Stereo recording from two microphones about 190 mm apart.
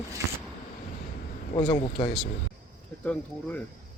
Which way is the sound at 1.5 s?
25° left (ahead or behind).